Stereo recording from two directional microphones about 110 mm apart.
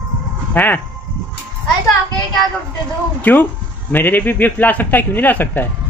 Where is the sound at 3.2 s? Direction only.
15° left (ahead or behind).